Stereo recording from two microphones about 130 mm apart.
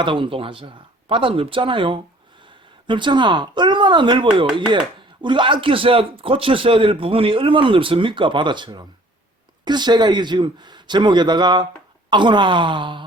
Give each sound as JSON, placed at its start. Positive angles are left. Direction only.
{"t": 0.0, "sound": "a man's voice", "side_deg": -40}